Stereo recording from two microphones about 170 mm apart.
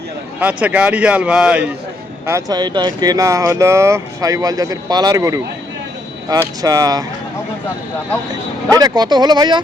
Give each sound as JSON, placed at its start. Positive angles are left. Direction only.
{"t": 0.3, "sound": "a man's voice", "side_deg": -10}
{"t": 2.2, "sound": "speech", "side_deg": -20}
{"t": 8.7, "sound": "speech", "side_deg": -25}